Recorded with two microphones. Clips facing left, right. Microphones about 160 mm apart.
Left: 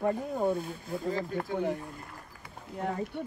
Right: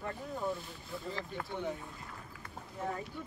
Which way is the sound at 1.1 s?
45° left (ahead or behind).